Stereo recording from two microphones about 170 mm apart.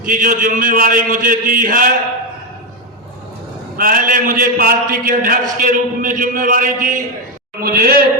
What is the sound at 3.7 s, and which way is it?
A man's voice, 55° right (ahead or behind).